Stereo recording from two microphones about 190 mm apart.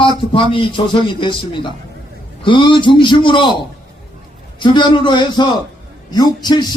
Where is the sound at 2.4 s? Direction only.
25° left (ahead or behind).